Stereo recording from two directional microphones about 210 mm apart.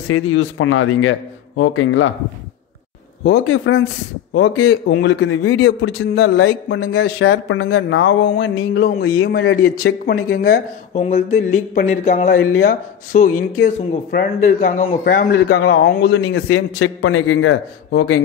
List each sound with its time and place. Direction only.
0.1 s a man's voice: 75° left (ahead or behind)
3.3 s a man's voice: 70° left (ahead or behind); by 9.5 s 50° left (ahead or behind)
11.2 s speech: 35° left (ahead or behind)
15.3 s a man's voice: 50° left (ahead or behind)
16.1 s a man's voice: 85° left
16.8 s a man's voice: 75° left (ahead or behind)